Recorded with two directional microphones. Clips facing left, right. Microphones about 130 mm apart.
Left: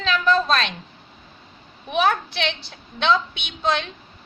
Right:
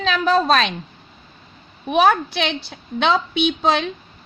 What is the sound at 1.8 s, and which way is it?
Speech, 50° right (ahead or behind).